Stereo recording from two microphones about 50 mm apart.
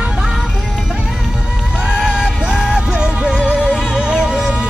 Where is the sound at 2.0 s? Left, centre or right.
Centre.